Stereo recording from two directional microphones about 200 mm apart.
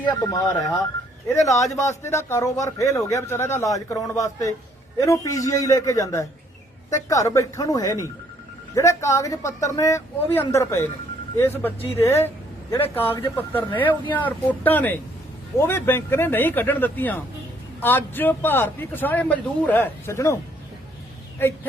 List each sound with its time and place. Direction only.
0.0 s a man's voice: 15° left (ahead or behind)